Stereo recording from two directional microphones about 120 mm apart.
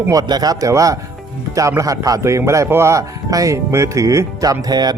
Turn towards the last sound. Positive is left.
turn(degrees=-35)  # may be behind; listen again after turning